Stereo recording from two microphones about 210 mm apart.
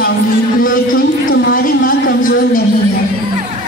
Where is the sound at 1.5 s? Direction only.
40° left (ahead or behind).